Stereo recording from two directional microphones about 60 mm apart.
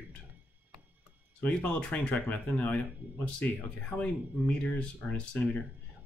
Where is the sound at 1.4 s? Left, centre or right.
Left.